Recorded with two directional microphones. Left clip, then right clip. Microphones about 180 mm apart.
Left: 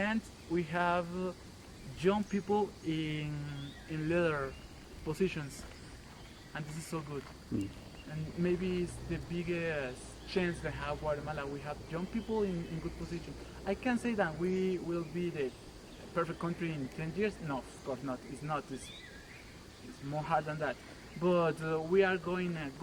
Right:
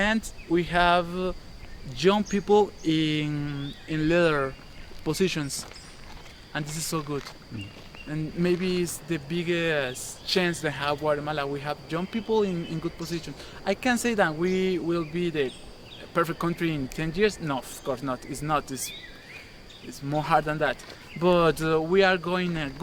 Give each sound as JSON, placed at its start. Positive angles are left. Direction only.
{"t": 0.0, "sound": "speech", "side_deg": -30}
{"t": 6.5, "sound": "speech", "side_deg": -35}
{"t": 8.4, "sound": "speech", "side_deg": -25}
{"t": 13.7, "sound": "speech", "side_deg": -20}
{"t": 20.1, "sound": "speech", "side_deg": -25}